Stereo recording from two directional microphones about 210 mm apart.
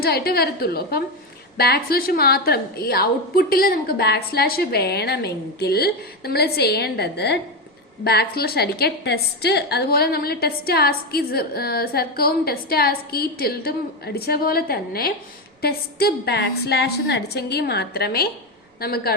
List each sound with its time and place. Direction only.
0.0 s a woman's voice: 45° left (ahead or behind)